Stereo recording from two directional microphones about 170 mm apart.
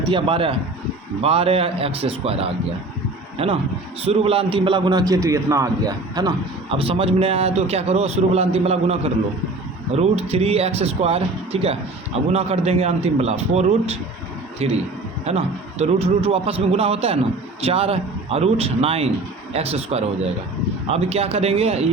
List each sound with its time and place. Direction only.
0.1 s a man's voice: 30° right (ahead or behind)